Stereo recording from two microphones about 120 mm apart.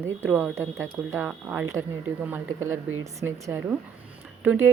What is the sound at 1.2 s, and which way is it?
A woman's voice, 15° right (ahead or behind).